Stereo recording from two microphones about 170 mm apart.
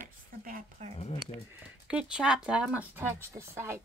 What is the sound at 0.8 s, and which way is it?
Speech, 40° right (ahead or behind).